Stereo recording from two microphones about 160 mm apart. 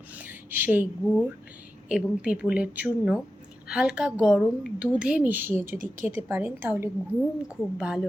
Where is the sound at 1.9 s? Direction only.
5° right (ahead or behind).